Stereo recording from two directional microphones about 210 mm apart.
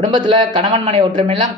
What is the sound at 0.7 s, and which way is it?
Speech, 25° right (ahead or behind).